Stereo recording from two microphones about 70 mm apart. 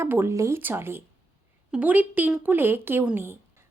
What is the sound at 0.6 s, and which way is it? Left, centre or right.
Speech, right.